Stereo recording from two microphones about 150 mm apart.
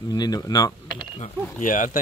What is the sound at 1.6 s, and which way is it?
Speech, 60° left (ahead or behind).